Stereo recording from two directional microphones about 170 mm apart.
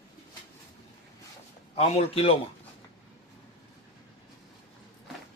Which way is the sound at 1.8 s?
35° left (ahead or behind).